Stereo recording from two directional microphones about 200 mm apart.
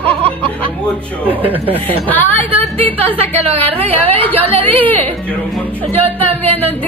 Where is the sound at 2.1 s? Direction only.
10° left (ahead or behind).